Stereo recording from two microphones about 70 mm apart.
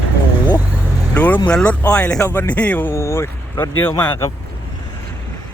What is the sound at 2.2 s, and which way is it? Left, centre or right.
Speech, left.